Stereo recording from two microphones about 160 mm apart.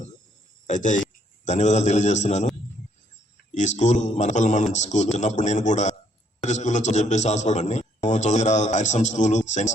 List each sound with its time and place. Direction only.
0.7 s a man's voice: 50° left (ahead or behind)
3.5 s a man's voice: 50° left (ahead or behind)